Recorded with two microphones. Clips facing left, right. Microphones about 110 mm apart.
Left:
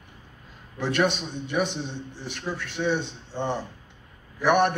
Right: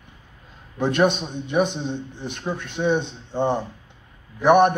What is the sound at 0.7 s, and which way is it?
A man's voice, 20° right (ahead or behind).